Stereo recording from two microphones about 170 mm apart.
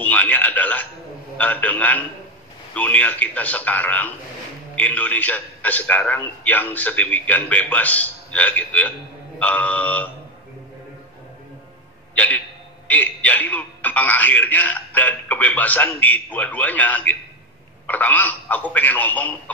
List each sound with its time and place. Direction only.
0.0 s a man's voice: 10° left (ahead or behind)
12.2 s a man's voice: 10° left (ahead or behind)